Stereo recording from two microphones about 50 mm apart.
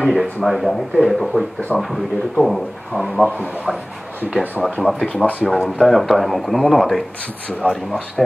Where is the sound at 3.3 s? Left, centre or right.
Left.